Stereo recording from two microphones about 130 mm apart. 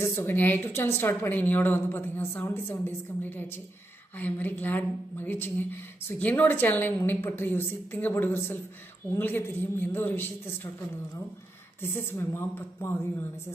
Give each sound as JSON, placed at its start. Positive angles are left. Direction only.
{"t": 0.0, "sound": "speech", "side_deg": 20}
{"t": 11.8, "sound": "speech", "side_deg": 20}